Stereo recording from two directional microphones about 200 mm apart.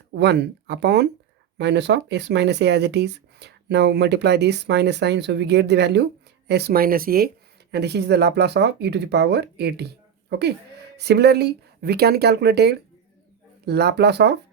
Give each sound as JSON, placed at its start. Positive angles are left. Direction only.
{"t": 0.1, "sound": "speech", "side_deg": -60}